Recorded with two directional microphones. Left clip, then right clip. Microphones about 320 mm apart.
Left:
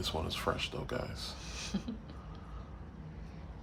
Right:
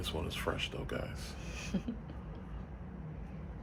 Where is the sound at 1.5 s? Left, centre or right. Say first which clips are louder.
Right 1 dB; centre.